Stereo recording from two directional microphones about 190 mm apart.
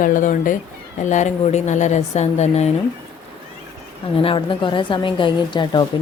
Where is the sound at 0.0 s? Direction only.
40° left (ahead or behind).